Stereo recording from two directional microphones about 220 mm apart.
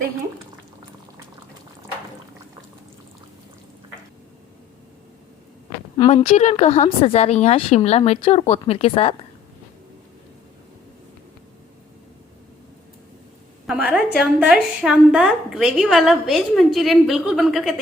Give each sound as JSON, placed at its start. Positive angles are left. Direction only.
{"t": 6.1, "sound": "speech", "side_deg": 30}
{"t": 13.7, "sound": "a woman's voice", "side_deg": -5}